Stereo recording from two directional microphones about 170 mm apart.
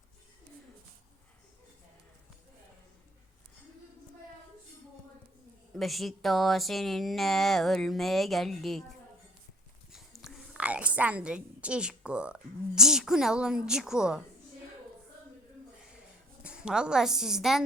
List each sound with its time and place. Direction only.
5.7 s a woman's voice: centre (ahead or behind)
9.9 s a woman's voice: centre (ahead or behind)
16.4 s a woman's voice: 5° right (ahead or behind)